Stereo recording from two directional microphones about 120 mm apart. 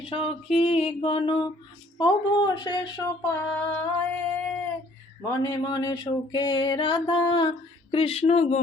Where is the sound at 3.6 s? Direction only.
15° left (ahead or behind).